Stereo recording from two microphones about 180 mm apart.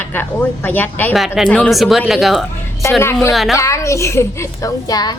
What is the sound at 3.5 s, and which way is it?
A woman's voice, 15° left (ahead or behind).